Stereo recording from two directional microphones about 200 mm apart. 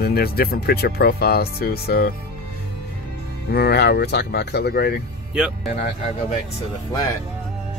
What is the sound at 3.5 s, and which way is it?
Speech, 55° left (ahead or behind).